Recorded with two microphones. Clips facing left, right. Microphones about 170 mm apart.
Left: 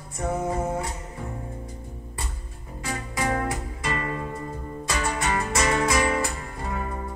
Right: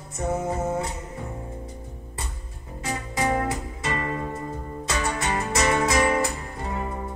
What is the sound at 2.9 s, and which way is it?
Music, 25° right (ahead or behind).